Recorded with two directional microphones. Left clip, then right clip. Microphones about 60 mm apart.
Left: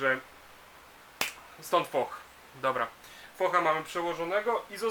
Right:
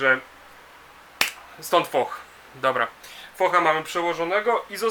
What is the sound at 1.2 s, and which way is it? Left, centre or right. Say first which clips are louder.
Finger snapping: right 9 dB; right.